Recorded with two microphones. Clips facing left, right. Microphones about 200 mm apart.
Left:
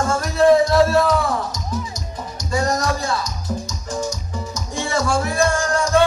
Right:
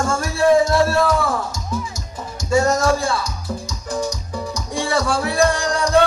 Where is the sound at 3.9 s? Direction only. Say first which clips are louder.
Right 2 dB; 35° right (ahead or behind).